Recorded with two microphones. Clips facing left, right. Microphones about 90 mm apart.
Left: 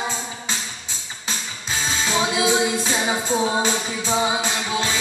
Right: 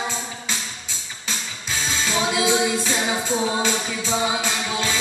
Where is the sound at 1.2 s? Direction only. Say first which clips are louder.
Left 1 dB; 25° left (ahead or behind).